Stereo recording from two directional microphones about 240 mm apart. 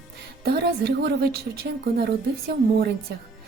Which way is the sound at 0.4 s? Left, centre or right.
Right.